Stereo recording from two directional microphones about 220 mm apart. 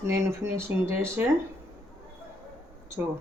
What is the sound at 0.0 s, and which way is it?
Speech, 10° right (ahead or behind).